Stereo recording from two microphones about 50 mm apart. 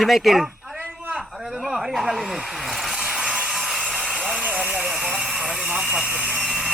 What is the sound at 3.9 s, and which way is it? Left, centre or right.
Vehicle, centre.